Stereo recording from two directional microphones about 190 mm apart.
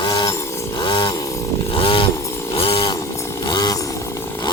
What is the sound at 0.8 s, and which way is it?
Chainsaw, 25° left (ahead or behind).